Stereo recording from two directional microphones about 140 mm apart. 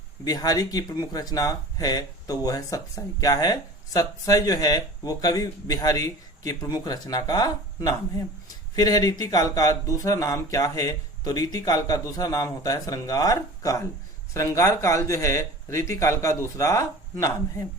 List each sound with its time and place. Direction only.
0.3 s speech: 25° left (ahead or behind)